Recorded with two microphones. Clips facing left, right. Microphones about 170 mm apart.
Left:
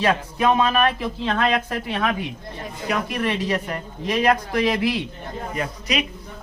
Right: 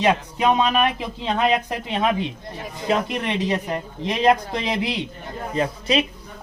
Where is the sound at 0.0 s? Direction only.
20° right (ahead or behind).